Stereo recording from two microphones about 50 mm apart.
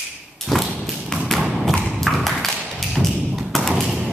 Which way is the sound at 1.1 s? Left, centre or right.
Centre.